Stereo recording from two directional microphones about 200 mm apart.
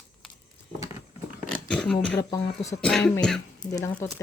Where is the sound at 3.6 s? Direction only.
15° left (ahead or behind).